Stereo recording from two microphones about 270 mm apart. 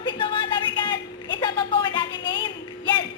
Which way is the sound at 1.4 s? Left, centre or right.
Centre.